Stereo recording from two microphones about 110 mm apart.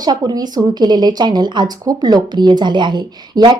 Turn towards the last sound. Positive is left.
turn(degrees=-45)  # may be behind; listen again after turning